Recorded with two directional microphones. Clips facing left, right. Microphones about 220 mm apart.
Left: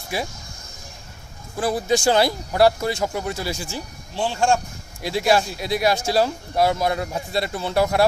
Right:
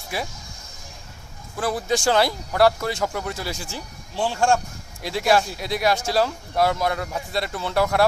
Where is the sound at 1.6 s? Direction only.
25° left (ahead or behind).